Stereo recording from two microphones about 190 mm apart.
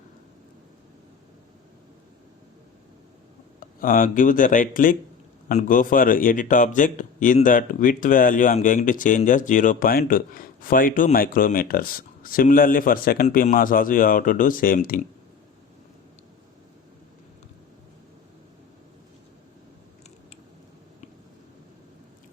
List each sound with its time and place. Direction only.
3.6 s a man's voice: 45° left (ahead or behind)